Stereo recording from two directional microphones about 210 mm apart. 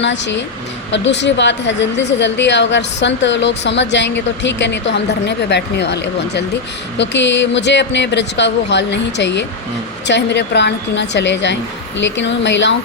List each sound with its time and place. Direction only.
0.0 s a woman's voice: 60° left (ahead or behind)